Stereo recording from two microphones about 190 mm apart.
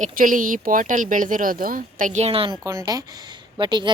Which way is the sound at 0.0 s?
45° right (ahead or behind).